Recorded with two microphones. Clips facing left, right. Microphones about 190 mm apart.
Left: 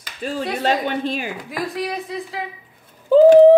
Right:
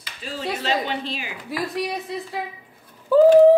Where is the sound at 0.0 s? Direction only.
50° left (ahead or behind).